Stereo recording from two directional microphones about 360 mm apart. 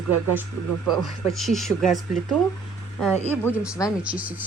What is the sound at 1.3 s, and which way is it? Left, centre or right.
Speech, centre.